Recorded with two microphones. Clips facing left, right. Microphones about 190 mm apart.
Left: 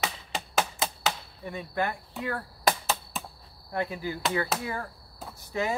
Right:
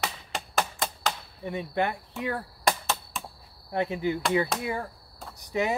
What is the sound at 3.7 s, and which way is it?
Speech, 20° right (ahead or behind).